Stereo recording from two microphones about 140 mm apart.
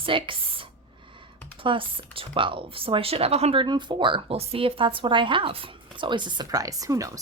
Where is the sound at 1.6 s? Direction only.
40° right (ahead or behind).